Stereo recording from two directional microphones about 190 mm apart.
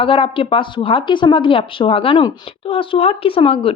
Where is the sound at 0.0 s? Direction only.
30° left (ahead or behind).